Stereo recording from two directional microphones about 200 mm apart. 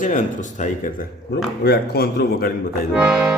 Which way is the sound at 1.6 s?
55° left (ahead or behind).